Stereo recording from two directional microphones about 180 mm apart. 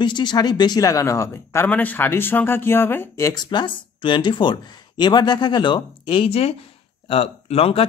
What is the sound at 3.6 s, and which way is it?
Speech, 25° left (ahead or behind).